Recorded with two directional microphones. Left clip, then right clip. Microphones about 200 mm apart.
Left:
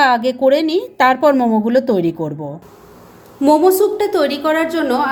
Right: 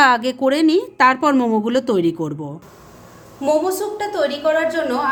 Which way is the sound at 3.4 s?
35° left (ahead or behind).